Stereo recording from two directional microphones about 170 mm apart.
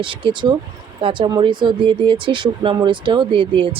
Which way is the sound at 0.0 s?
30° right (ahead or behind).